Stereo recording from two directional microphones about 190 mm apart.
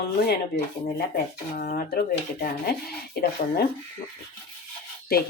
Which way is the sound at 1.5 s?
50° left (ahead or behind).